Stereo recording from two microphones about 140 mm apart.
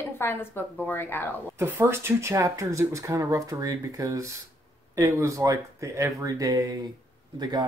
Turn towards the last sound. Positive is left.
turn(degrees=-30)  # may be behind; listen again after turning